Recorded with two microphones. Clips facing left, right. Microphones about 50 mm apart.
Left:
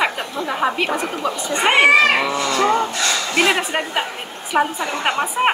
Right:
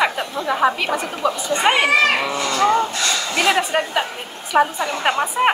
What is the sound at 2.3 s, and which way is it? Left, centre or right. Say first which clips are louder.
Speech: left 1 dB; left.